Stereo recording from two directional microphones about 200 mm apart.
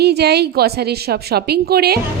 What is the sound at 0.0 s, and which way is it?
A woman's voice, 55° right (ahead or behind).